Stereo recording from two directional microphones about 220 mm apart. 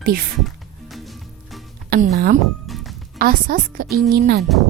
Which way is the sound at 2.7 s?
Centre (ahead or behind).